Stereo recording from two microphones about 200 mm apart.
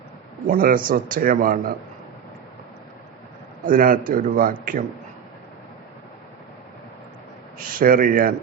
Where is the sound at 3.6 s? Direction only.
45° right (ahead or behind).